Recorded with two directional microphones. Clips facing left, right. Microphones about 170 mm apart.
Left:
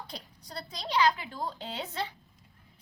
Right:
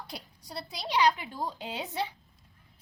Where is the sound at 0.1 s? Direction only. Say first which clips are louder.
Right 1 dB; 10° right (ahead or behind).